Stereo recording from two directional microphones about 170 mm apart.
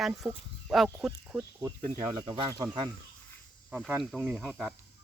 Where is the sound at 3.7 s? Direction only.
Centre (ahead or behind).